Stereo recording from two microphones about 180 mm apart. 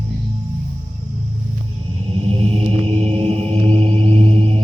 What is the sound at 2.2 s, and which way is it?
Music, 35° right (ahead or behind).